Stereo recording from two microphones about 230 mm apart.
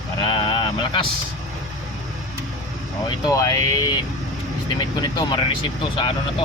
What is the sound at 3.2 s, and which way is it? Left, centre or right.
Speech, centre.